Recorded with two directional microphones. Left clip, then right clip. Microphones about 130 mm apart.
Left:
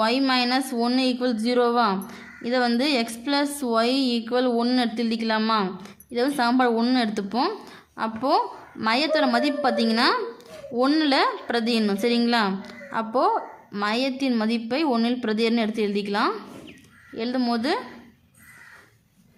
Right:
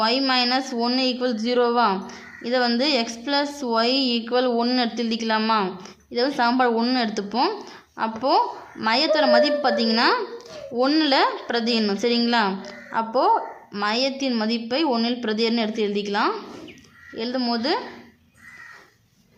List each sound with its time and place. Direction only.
0.0 s speech: 35° left (ahead or behind)